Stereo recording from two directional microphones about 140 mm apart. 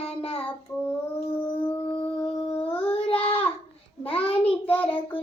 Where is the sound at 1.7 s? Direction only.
40° left (ahead or behind).